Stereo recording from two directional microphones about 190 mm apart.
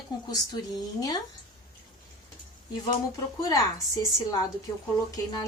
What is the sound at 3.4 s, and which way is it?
Speech, 20° left (ahead or behind).